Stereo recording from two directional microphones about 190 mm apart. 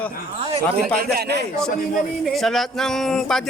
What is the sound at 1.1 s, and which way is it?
Speech, 60° right (ahead or behind).